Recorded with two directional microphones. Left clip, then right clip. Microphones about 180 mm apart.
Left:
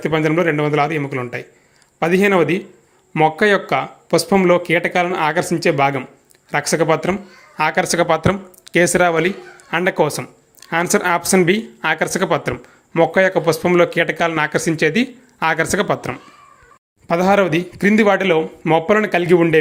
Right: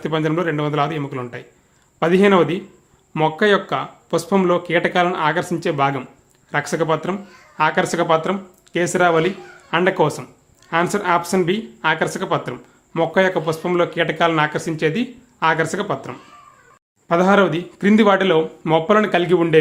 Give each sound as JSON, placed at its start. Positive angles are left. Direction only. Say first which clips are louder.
{"t": 0.0, "sound": "speech", "louder": "left 4 dB", "side_deg": 10}